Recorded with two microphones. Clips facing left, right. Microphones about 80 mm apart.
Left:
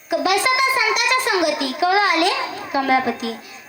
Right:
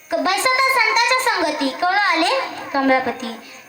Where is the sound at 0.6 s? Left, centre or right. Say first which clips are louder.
Right 2 dB; right.